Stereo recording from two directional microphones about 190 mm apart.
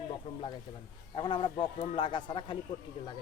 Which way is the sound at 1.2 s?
25° left (ahead or behind).